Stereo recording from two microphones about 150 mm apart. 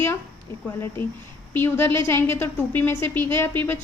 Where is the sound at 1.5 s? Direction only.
15° left (ahead or behind).